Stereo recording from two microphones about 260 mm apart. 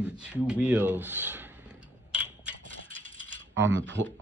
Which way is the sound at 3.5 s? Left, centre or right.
Right.